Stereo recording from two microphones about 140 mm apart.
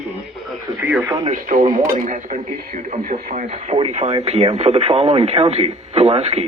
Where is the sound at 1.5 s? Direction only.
70° right (ahead or behind).